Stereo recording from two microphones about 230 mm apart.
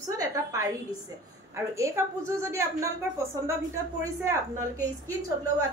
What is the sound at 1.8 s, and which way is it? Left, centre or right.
A woman's voice, centre.